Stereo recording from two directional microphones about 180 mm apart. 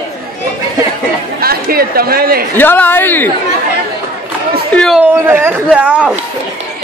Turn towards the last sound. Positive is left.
turn(degrees=-5)  # may be behind; listen again after turning